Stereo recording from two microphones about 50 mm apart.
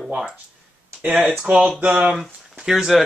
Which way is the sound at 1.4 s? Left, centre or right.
Right.